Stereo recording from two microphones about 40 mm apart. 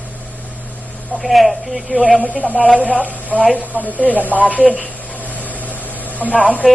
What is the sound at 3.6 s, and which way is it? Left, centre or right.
A woman's voice, right.